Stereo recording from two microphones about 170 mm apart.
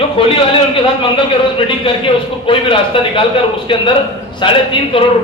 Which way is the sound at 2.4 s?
30° left (ahead or behind).